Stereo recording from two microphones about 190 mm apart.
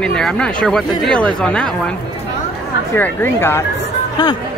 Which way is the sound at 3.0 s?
10° left (ahead or behind).